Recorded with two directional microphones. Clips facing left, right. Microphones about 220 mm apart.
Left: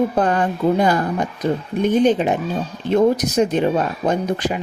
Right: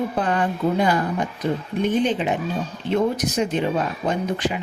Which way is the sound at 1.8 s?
45° left (ahead or behind).